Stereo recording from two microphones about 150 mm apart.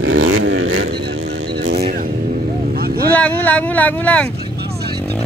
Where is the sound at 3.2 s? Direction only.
10° left (ahead or behind).